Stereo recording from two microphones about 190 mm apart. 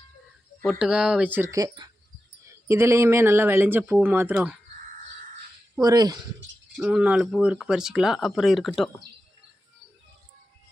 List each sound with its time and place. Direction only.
0.6 s speech: centre (ahead or behind)
5.8 s speech: 20° right (ahead or behind)
6.7 s speech: 5° right (ahead or behind)